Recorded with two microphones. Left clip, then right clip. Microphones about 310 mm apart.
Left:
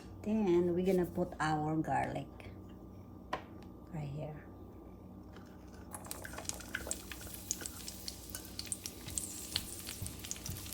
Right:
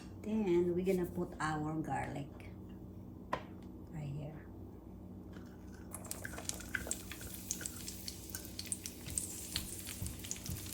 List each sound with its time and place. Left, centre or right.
0.3 s speech: left
6.3 s a sound: centre
9.5 s water tap: centre